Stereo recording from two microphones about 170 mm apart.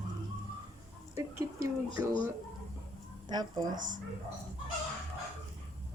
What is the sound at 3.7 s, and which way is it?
Speech, 50° right (ahead or behind).